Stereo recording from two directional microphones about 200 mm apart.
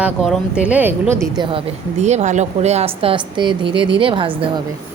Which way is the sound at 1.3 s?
25° right (ahead or behind).